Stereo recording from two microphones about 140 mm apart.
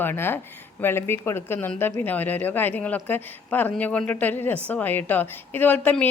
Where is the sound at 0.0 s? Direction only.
15° left (ahead or behind).